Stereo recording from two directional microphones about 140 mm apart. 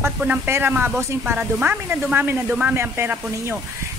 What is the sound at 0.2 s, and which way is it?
A woman's voice, 10° right (ahead or behind).